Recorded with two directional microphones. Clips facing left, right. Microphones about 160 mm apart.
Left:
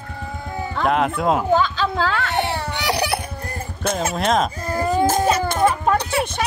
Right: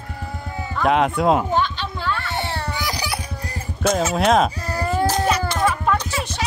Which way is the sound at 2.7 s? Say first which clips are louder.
Left 5 dB; 70° left (ahead or behind).